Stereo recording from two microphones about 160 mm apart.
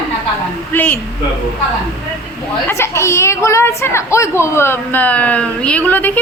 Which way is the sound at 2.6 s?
15° left (ahead or behind).